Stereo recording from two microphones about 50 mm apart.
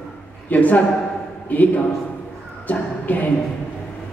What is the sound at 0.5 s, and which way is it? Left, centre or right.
A man's voice, left.